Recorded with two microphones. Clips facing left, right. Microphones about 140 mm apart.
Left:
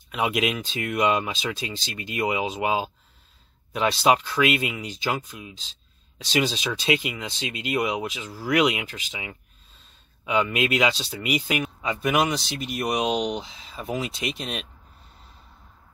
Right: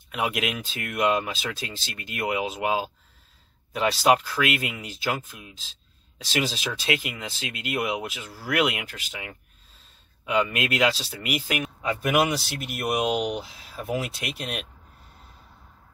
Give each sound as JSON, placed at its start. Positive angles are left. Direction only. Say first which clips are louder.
{"t": 0.1, "sound": "speech", "louder": "left 3 dB", "side_deg": -5}
{"t": 3.9, "sound": "speech", "louder": "even", "side_deg": -5}
{"t": 10.2, "sound": "speech", "louder": "left 1 dB", "side_deg": 0}